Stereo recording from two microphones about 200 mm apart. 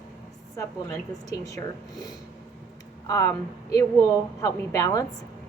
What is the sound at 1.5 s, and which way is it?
A woman's voice, 20° left (ahead or behind).